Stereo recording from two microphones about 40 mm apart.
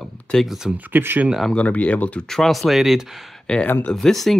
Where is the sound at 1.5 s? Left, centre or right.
Left.